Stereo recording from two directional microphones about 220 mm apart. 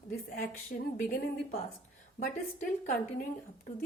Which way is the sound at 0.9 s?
40° left (ahead or behind).